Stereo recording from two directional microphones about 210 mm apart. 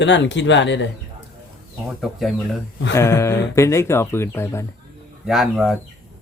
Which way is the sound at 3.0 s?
15° left (ahead or behind).